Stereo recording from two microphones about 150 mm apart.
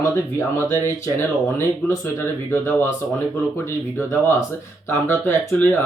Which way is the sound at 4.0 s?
15° left (ahead or behind).